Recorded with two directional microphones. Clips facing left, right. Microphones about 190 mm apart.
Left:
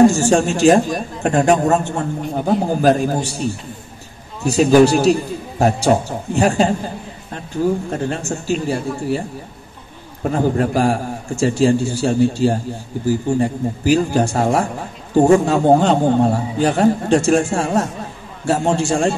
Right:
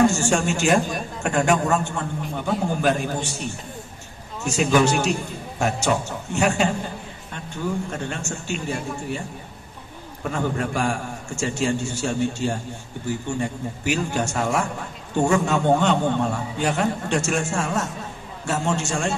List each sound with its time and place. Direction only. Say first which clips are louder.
0.0 s a man's voice: left 7 dB; 35° left (ahead or behind)
10.2 s a man's voice: left 8 dB; 35° left (ahead or behind)